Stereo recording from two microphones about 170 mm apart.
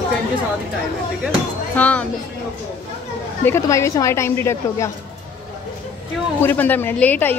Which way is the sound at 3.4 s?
15° left (ahead or behind).